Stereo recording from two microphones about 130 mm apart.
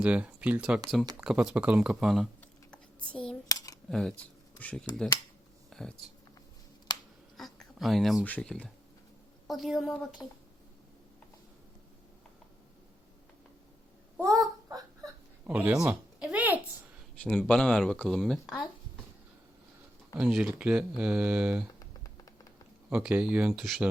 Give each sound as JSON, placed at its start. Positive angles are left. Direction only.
{"t": 0.0, "sound": "speech", "side_deg": -10}
{"t": 2.4, "sound": "computer keyboard", "side_deg": 10}
{"t": 3.8, "sound": "speech", "side_deg": 5}
{"t": 5.7, "sound": "a sound", "side_deg": 5}
{"t": 7.3, "sound": "a sound", "side_deg": 0}
{"t": 8.2, "sound": "speech", "side_deg": 10}
{"t": 14.2, "sound": "a sound", "side_deg": -25}
{"t": 15.4, "sound": "speech", "side_deg": -10}
{"t": 15.9, "sound": "a sound", "side_deg": -10}
{"t": 17.2, "sound": "speech", "side_deg": 5}
{"t": 20.1, "sound": "speech", "side_deg": -5}
{"t": 22.9, "sound": "speech", "side_deg": -10}
{"t": 23.6, "sound": "speech", "side_deg": 0}